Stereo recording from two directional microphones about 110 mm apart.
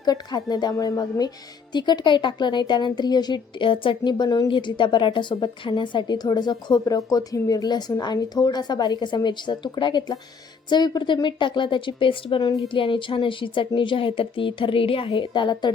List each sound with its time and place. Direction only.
0.0 s a woman's voice: 35° left (ahead or behind)